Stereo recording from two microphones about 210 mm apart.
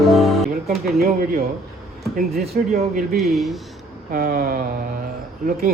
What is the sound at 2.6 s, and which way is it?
Speech, 45° right (ahead or behind).